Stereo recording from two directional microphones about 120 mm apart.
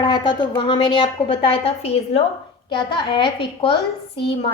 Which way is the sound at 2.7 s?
40° left (ahead or behind).